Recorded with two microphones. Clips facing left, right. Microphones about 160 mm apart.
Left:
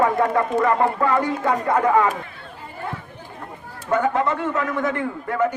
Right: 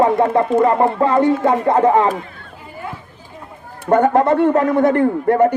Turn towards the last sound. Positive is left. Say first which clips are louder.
# right 9 dB
turn(degrees=-45)  # may be behind; listen again after turning